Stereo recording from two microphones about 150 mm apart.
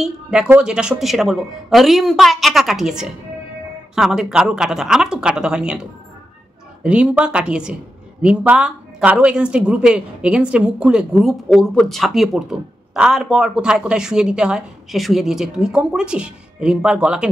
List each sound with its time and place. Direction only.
0.0 s speech: 5° right (ahead or behind)